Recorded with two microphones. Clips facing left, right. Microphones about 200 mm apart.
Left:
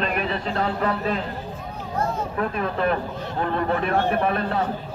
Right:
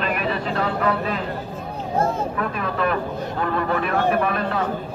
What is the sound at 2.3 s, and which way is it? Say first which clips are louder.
Speech: even; 35° left (ahead or behind).